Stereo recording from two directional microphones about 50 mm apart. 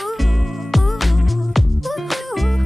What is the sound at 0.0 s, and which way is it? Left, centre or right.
Music, centre.